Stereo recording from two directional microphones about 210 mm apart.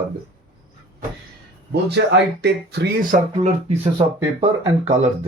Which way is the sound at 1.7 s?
55° right (ahead or behind).